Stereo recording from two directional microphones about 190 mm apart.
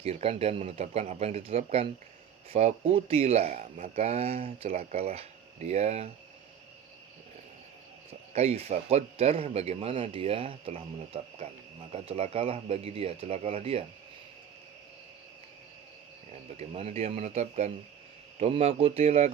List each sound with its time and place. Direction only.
0.0 s speech: 30° right (ahead or behind)
8.3 s speech: 35° right (ahead or behind)
16.6 s speech: 35° right (ahead or behind)